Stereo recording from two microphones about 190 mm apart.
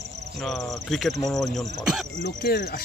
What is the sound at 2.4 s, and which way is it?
Speech, 50° left (ahead or behind).